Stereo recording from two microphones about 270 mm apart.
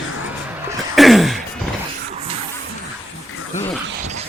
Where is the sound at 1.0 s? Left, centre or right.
Centre.